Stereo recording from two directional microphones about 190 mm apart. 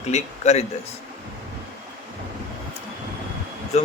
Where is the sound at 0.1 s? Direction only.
35° left (ahead or behind).